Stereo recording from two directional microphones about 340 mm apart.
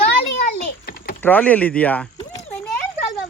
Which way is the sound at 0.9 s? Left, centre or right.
Left.